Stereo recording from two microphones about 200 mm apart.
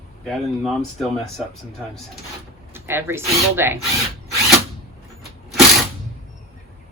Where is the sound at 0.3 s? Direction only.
Centre (ahead or behind).